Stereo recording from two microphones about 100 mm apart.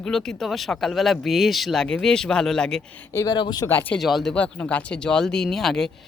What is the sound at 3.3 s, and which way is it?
Speech, 45° left (ahead or behind).